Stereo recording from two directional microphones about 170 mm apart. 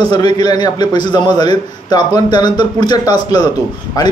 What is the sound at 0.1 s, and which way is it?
A man's voice, 25° left (ahead or behind).